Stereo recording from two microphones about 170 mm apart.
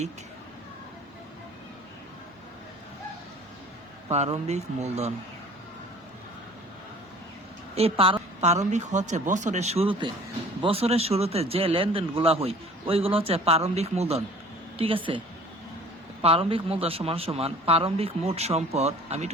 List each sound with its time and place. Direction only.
4.1 s a man's voice: 40° right (ahead or behind)
7.8 s a man's voice: 35° right (ahead or behind)
16.2 s a man's voice: 35° right (ahead or behind)